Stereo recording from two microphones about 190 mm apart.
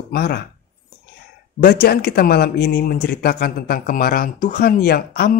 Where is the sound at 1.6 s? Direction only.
55° left (ahead or behind).